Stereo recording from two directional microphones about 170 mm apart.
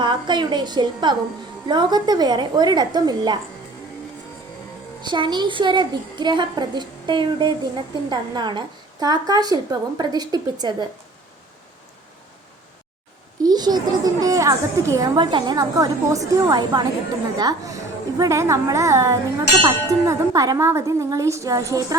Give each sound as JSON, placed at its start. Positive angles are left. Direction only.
{"t": 0.0, "sound": "a woman's voice", "side_deg": -25}
{"t": 5.0, "sound": "a woman's voice", "side_deg": -25}
{"t": 13.4, "sound": "a woman's voice", "side_deg": -25}